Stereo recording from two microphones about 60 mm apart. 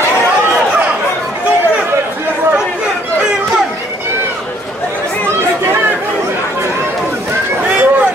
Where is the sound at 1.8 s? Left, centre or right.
Right.